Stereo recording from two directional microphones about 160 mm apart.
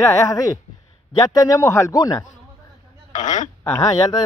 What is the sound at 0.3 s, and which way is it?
Speech, 25° left (ahead or behind).